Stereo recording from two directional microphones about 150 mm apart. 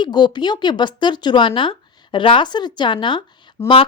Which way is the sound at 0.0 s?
30° left (ahead or behind).